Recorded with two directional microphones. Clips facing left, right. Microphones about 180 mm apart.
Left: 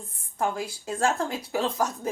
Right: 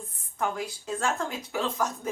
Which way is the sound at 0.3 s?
35° left (ahead or behind).